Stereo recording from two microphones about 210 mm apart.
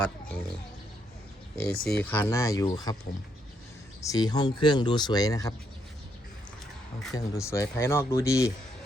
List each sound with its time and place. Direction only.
1.8 s speech: 5° left (ahead or behind)
7.1 s speech: 15° left (ahead or behind)